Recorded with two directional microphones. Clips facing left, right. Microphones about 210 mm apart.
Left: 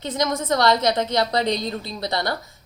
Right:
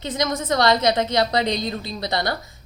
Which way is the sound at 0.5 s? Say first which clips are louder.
Right 1 dB; 20° right (ahead or behind).